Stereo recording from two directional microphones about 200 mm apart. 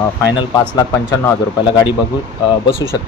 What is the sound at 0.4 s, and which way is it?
Speech, 20° left (ahead or behind).